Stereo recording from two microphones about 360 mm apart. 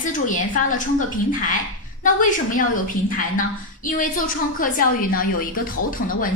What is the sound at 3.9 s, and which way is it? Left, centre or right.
Speech, left.